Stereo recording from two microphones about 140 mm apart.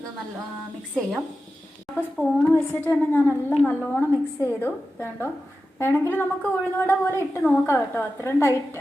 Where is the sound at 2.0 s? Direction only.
15° left (ahead or behind).